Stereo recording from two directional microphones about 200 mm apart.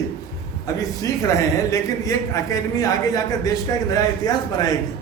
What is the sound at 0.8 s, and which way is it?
A man's voice, 15° left (ahead or behind).